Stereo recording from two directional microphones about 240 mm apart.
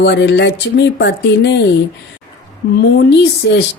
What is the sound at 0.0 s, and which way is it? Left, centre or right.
A woman's voice, left.